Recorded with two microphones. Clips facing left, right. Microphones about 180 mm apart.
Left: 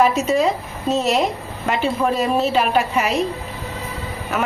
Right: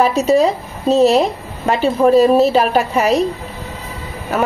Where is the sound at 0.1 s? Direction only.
35° right (ahead or behind).